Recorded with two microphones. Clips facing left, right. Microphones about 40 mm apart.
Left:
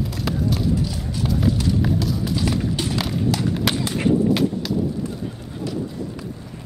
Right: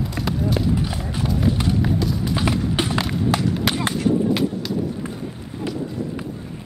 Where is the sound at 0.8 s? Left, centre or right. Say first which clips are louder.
Right 1 dB; right.